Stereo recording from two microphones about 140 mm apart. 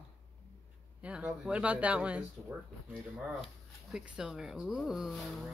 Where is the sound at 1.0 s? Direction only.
10° right (ahead or behind).